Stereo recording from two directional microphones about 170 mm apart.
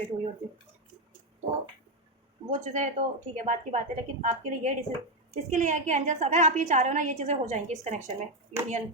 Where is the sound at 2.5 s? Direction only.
45° right (ahead or behind).